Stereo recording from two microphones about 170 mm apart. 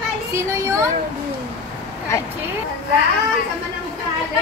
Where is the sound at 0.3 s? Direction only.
15° right (ahead or behind).